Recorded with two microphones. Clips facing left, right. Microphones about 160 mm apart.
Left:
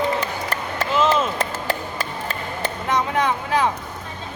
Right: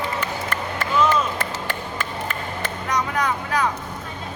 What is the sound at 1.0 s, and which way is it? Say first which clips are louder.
Chop: left 1 dB; 25° left (ahead or behind).